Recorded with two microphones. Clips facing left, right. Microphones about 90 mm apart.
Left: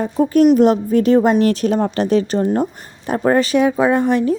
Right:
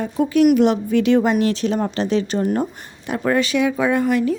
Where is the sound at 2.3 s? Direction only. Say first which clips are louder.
Left 3 dB; 25° left (ahead or behind).